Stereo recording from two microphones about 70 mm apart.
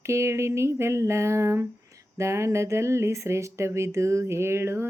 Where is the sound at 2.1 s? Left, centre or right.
Right.